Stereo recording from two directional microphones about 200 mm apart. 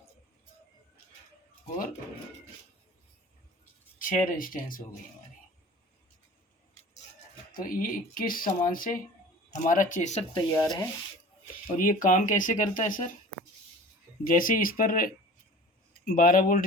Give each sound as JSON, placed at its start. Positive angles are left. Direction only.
{"t": 3.9, "sound": "speech", "side_deg": 40}
{"t": 7.5, "sound": "speech", "side_deg": 45}
{"t": 10.5, "sound": "rub", "side_deg": 15}
{"t": 11.8, "sound": "speech", "side_deg": 40}
{"t": 14.3, "sound": "speech", "side_deg": 45}